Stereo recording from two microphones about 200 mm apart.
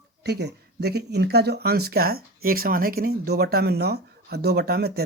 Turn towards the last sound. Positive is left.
turn(degrees=-50)  # may be behind; listen again after turning